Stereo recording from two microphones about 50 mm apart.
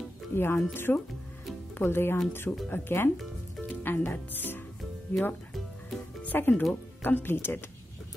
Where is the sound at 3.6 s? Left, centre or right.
Left.